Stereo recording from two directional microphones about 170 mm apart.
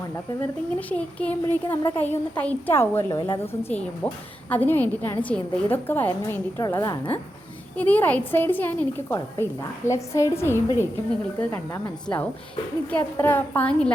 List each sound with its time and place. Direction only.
0.3 s a woman's voice: 10° left (ahead or behind)
6.7 s a woman's voice: 25° left (ahead or behind)
7.8 s a woman's voice: 10° left (ahead or behind)
12.9 s a woman's voice: 10° left (ahead or behind)